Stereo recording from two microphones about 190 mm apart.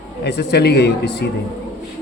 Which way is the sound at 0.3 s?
60° left (ahead or behind).